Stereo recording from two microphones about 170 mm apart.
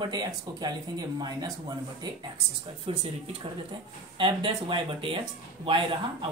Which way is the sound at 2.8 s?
35° right (ahead or behind).